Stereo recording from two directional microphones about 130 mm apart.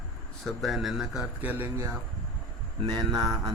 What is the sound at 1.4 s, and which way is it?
Speech, 15° right (ahead or behind).